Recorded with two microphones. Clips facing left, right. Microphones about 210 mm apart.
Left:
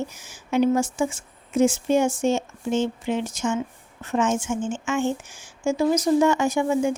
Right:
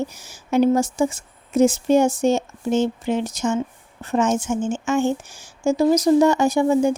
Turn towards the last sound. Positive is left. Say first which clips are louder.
# right 4 dB
turn(degrees=-35)  # may be behind; listen again after turning